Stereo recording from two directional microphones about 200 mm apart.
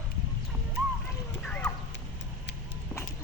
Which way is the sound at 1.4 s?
10° left (ahead or behind).